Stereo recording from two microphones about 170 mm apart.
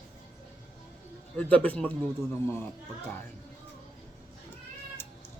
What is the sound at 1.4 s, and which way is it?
Speech, 10° left (ahead or behind).